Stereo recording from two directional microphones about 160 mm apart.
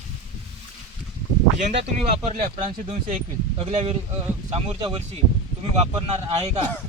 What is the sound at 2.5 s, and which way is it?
Speech, 35° right (ahead or behind).